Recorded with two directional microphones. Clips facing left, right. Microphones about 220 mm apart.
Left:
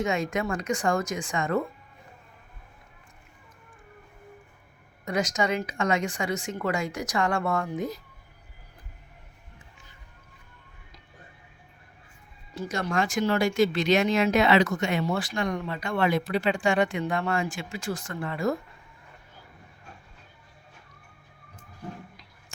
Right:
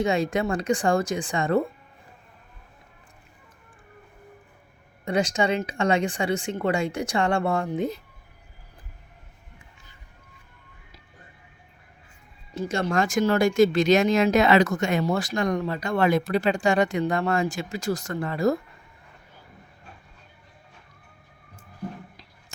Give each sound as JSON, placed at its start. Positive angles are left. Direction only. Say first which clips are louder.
{"t": 0.0, "sound": "speech", "louder": "right 4 dB", "side_deg": -35}
{"t": 5.0, "sound": "speech", "louder": "right 3 dB", "side_deg": -30}
{"t": 12.5, "sound": "speech", "louder": "right 4 dB", "side_deg": -25}
{"t": 12.9, "sound": "speech", "louder": "right 3 dB", "side_deg": -45}